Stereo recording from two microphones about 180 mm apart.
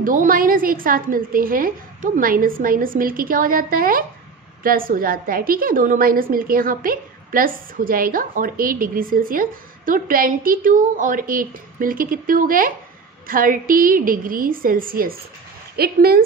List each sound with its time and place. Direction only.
0.0 s a woman's voice: 50° right (ahead or behind)